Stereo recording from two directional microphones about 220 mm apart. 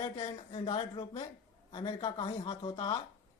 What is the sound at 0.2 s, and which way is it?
Speech, 25° left (ahead or behind).